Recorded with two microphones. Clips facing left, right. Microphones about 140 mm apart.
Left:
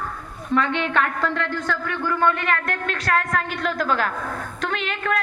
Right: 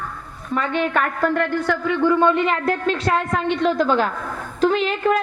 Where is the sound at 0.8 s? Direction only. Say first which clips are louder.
Right 3 dB; 10° right (ahead or behind).